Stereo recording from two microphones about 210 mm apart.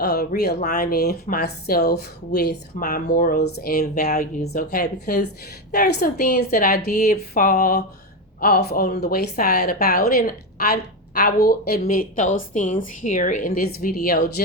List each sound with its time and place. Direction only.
0.0 s a woman's voice: 50° left (ahead or behind)
8.4 s a woman's voice: 50° left (ahead or behind)